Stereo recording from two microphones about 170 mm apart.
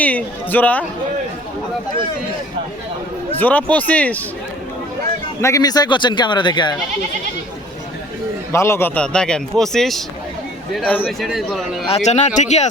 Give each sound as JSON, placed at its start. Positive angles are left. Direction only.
{"t": 0.0, "sound": "speech", "side_deg": 10}
{"t": 3.3, "sound": "speech", "side_deg": 10}
{"t": 5.4, "sound": "a man's voice", "side_deg": 20}
{"t": 8.5, "sound": "a man's voice", "side_deg": 15}
{"t": 11.3, "sound": "a man's voice", "side_deg": 0}
{"t": 11.9, "sound": "speech", "side_deg": 40}